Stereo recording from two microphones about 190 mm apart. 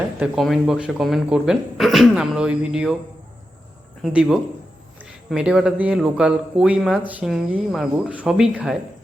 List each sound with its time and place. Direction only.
0.3 s speech: centre (ahead or behind)
4.0 s speech: 5° right (ahead or behind)